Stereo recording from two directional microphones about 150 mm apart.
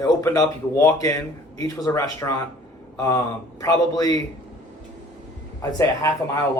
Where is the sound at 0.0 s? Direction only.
25° left (ahead or behind).